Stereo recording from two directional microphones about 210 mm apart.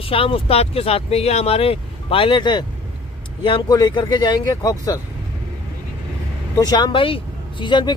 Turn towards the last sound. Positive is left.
turn(degrees=20)  # may be behind; listen again after turning